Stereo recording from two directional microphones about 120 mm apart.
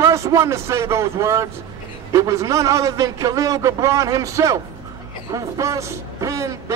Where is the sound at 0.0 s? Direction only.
25° right (ahead or behind).